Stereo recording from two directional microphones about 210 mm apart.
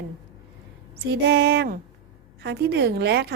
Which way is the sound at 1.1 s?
50° right (ahead or behind).